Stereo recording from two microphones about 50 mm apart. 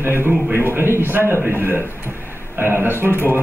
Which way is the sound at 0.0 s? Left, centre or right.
Right.